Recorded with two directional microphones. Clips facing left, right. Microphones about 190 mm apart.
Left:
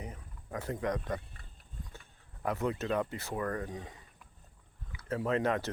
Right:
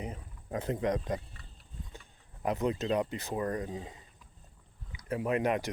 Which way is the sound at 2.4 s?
20° right (ahead or behind).